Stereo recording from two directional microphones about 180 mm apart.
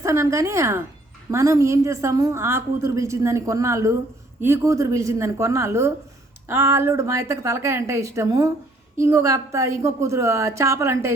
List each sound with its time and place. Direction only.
0.0 s a woman's voice: 15° right (ahead or behind)